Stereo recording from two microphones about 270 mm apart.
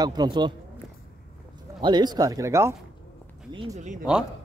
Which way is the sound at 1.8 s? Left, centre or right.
Centre.